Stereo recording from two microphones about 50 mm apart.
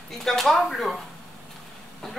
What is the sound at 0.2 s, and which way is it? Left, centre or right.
Speech, centre.